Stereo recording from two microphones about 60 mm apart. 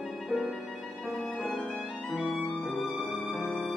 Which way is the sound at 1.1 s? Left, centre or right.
Centre.